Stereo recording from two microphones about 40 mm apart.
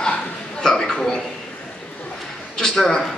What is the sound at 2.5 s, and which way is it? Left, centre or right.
Speech, centre.